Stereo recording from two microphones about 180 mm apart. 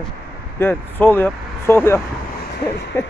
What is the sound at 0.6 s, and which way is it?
Speech, 10° left (ahead or behind).